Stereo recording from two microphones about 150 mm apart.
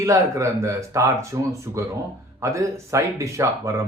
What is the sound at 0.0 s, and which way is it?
Speech, 20° right (ahead or behind).